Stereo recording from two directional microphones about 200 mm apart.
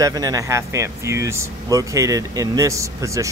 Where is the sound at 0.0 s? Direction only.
15° right (ahead or behind).